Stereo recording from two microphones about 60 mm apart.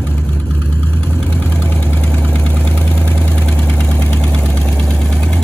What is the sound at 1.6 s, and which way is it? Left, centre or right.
Engine, left.